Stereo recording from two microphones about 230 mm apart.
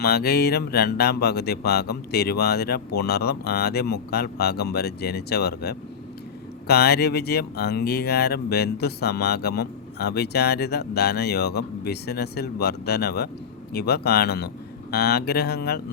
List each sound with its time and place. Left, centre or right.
0.0 s speech: left